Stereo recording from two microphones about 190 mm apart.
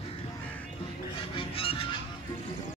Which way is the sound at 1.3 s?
30° left (ahead or behind).